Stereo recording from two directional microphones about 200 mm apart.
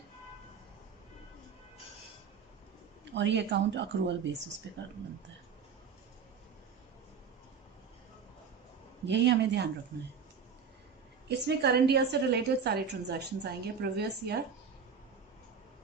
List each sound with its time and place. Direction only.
3.2 s a woman's voice: 60° right (ahead or behind)
9.0 s a woman's voice: 60° right (ahead or behind)
11.3 s a woman's voice: 55° right (ahead or behind)